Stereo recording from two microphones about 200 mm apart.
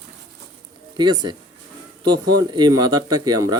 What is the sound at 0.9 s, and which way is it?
Speech, 20° right (ahead or behind).